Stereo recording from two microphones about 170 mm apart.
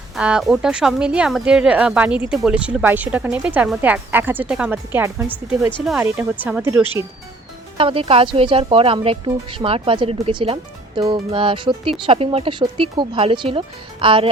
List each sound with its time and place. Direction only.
0.2 s speech: 5° right (ahead or behind)
7.8 s speech: 30° right (ahead or behind)